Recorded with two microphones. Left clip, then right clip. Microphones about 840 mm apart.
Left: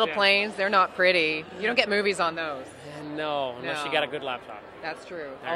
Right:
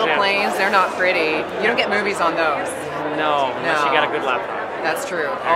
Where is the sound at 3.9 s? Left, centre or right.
Left.